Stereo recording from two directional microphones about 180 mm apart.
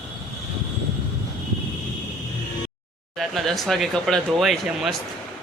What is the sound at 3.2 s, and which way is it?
Speech, centre (ahead or behind).